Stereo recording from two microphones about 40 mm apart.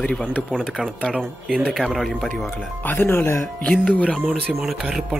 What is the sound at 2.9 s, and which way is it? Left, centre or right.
Speech, left.